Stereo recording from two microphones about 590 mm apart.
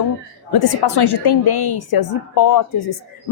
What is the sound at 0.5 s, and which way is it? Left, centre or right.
A woman's voice, left.